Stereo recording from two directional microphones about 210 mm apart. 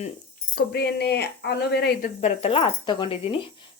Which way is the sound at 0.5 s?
50° left (ahead or behind).